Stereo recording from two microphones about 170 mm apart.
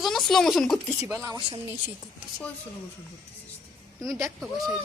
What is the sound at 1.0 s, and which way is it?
Speech, 20° right (ahead or behind).